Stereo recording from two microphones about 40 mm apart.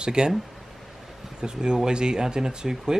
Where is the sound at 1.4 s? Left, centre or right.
Centre.